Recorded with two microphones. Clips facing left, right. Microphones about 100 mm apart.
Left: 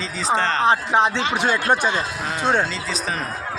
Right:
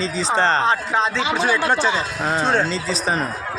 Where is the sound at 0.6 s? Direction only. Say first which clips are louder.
Left 2 dB; 20° left (ahead or behind).